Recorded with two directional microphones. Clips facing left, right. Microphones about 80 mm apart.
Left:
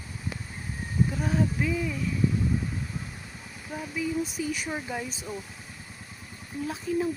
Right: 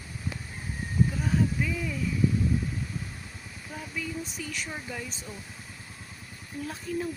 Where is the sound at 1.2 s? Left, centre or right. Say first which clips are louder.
Left 1 dB; centre.